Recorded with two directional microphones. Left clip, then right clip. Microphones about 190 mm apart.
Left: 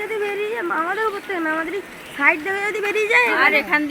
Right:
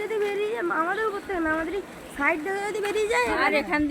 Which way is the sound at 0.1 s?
40° left (ahead or behind).